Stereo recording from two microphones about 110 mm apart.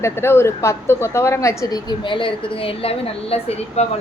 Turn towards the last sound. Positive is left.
turn(degrees=75)  # may be behind; listen again after turning